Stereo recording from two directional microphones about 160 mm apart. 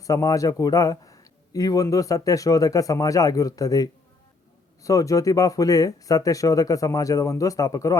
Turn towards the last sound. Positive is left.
turn(degrees=20)  # may be behind; listen again after turning